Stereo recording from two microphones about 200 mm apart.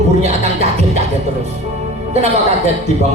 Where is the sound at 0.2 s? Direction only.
35° right (ahead or behind).